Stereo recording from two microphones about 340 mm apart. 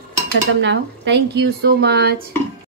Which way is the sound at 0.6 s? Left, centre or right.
Right.